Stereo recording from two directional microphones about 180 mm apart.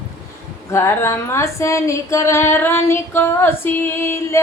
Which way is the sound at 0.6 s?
15° left (ahead or behind).